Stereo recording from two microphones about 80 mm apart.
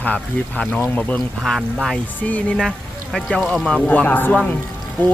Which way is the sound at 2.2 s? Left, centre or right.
Centre.